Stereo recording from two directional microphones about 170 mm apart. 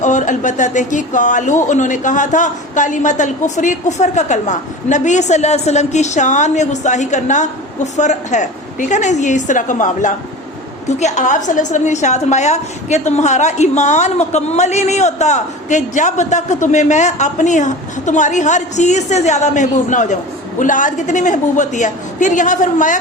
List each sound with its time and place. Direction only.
0.0 s a woman's voice: 45° left (ahead or behind)